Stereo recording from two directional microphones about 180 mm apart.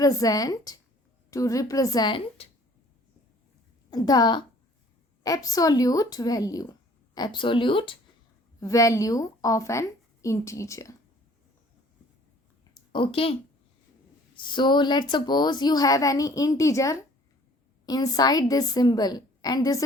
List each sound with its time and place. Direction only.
0.0 s a woman's voice: 20° left (ahead or behind)
3.8 s a woman's voice: 20° left (ahead or behind)
12.7 s a sound: 30° left (ahead or behind)
14.4 s a woman's voice: 25° left (ahead or behind)